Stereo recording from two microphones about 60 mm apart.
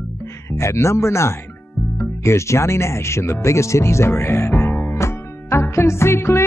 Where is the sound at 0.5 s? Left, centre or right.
Left.